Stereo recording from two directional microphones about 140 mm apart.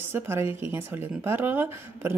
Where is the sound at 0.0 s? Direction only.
15° right (ahead or behind).